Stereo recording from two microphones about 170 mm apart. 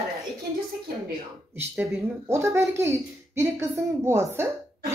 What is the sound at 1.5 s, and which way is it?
A woman's voice, 15° right (ahead or behind).